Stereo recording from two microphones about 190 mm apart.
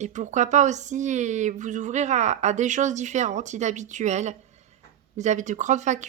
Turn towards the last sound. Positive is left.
turn(degrees=-40)  # may be behind; listen again after turning